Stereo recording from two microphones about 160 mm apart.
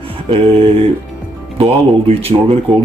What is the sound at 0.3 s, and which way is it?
Speech, 40° right (ahead or behind).